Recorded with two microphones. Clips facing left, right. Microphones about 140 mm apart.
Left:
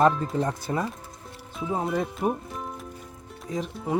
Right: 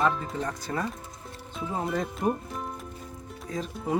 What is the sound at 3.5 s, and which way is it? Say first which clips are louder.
Speech: left 3 dB; 20° left (ahead or behind).